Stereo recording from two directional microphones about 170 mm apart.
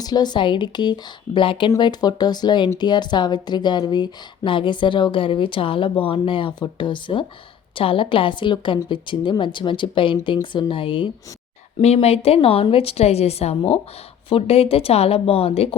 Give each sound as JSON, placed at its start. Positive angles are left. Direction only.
{"t": 0.0, "sound": "a woman's voice", "side_deg": 25}